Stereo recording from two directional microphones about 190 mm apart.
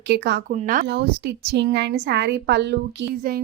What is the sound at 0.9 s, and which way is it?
A woman's voice, 65° right (ahead or behind).